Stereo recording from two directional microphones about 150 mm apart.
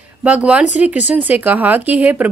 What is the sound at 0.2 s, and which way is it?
A woman's voice, 10° right (ahead or behind).